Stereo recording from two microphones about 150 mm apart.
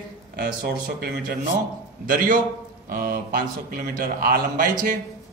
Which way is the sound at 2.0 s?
65° right (ahead or behind).